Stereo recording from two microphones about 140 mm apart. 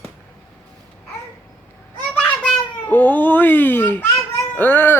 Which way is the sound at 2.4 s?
10° left (ahead or behind).